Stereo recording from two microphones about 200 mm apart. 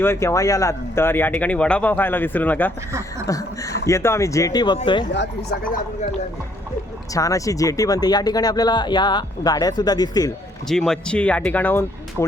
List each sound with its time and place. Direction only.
0.0 s speech: 10° left (ahead or behind)
5.1 s speech: 65° left (ahead or behind)
5.7 s speech: 35° left (ahead or behind)
7.1 s speech: 15° left (ahead or behind)
10.7 s speech: centre (ahead or behind)